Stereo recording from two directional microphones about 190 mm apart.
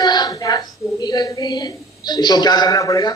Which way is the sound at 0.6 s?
Centre (ahead or behind).